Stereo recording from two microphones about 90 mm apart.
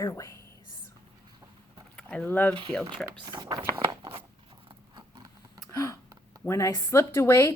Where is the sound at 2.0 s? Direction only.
15° left (ahead or behind).